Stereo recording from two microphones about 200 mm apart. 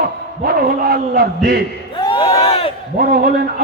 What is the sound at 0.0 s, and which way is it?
A man's voice, 50° right (ahead or behind).